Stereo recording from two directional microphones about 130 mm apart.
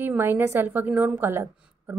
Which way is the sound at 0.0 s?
15° right (ahead or behind).